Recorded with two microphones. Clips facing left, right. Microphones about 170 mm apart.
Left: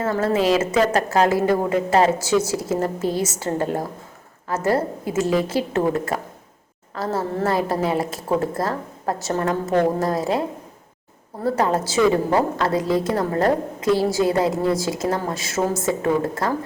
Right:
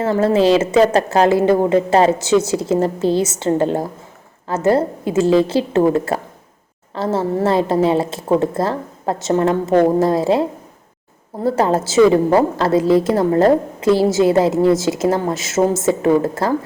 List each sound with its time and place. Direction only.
0.0 s a woman's voice: 30° right (ahead or behind)
11.4 s a woman's voice: 25° right (ahead or behind)